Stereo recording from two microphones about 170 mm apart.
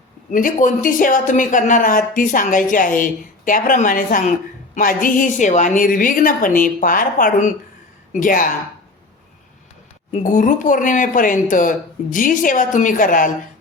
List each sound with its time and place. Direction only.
0.3 s speech: 50° left (ahead or behind)
10.1 s speech: 50° left (ahead or behind)